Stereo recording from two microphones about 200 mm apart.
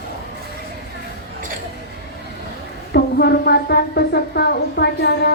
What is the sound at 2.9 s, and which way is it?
Speech, 50° left (ahead or behind).